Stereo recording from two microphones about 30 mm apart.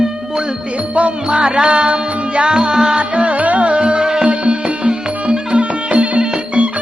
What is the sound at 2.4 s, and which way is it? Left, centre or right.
Speech, right.